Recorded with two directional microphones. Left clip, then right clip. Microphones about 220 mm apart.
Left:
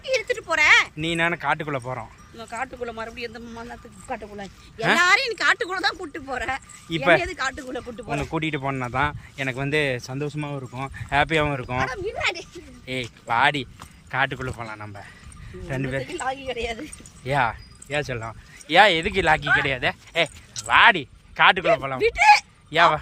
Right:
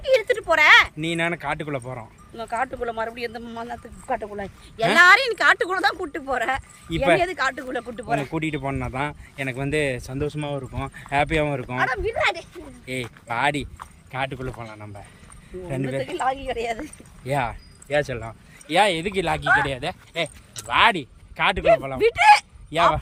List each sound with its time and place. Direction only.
0.0 s speech: 10° right (ahead or behind); by 2.0 s 5° left (ahead or behind)
2.3 s speech: 15° right (ahead or behind)
11.8 s speech: 10° right (ahead or behind)
16.0 s speech: 15° right (ahead or behind)
17.2 s speech: 5° left (ahead or behind)
22.0 s speech: 10° right (ahead or behind)
22.7 s speech: 5° left (ahead or behind)